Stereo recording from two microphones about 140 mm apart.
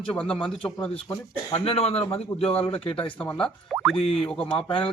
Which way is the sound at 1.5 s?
45° left (ahead or behind).